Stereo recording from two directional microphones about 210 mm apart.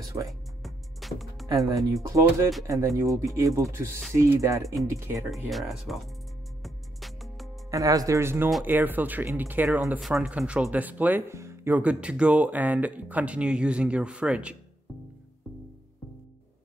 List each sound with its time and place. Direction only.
0.3 s music: centre (ahead or behind)
1.7 s speech: 15° right (ahead or behind)
5.3 s speech: centre (ahead or behind)
6.6 s music: centre (ahead or behind)
7.7 s speech: 15° right (ahead or behind)